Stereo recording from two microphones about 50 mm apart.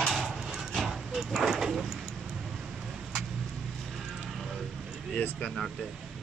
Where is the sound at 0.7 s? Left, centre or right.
Centre.